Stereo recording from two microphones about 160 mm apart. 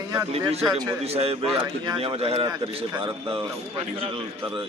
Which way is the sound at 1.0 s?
40° right (ahead or behind).